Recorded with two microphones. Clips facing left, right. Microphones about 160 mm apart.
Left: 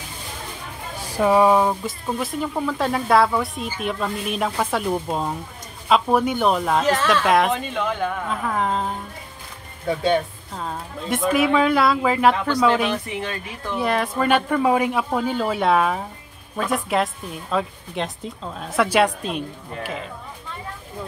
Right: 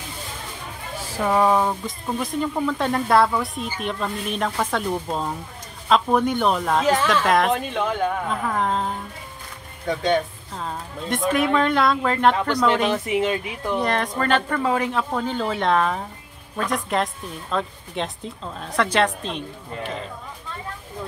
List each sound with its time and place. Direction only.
1.1 s speech: 15° left (ahead or behind)
12.9 s speech: 20° right (ahead or behind)
13.7 s speech: 5° left (ahead or behind)